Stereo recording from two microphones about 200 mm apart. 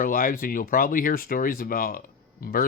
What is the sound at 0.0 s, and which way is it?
Speech, 45° left (ahead or behind).